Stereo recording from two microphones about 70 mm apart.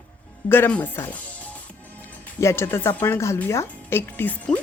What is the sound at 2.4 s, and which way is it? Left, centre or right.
A woman's voice, left.